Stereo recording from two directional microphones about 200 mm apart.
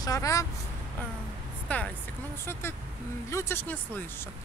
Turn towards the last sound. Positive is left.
turn(degrees=10)  # may be behind; listen again after turning